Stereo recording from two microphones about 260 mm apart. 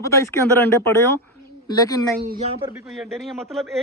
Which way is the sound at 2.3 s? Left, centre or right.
Right.